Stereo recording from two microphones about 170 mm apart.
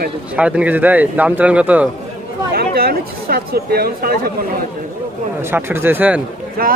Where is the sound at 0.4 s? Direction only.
10° right (ahead or behind).